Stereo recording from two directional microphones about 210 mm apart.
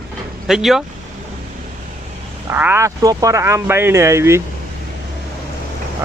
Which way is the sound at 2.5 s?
10° right (ahead or behind).